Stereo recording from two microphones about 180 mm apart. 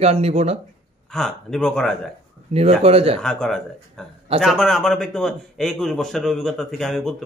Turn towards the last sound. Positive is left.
turn(degrees=0)  # may be behind; listen again after turning